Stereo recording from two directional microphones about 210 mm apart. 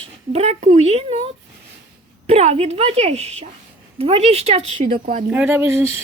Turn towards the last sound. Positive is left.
turn(degrees=-10)  # may be behind; listen again after turning